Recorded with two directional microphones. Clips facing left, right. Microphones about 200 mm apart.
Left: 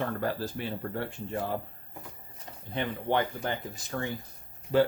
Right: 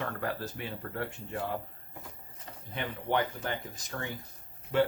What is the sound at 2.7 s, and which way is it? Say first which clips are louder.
Speech: left 3 dB; 30° left (ahead or behind).